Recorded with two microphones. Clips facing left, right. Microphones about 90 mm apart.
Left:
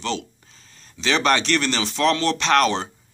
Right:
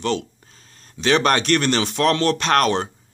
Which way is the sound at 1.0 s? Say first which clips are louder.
Right 2 dB; 45° right (ahead or behind).